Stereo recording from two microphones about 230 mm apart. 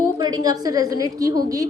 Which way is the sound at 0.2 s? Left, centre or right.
Centre.